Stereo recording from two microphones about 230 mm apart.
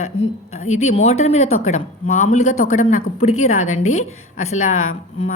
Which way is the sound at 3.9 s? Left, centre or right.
Left.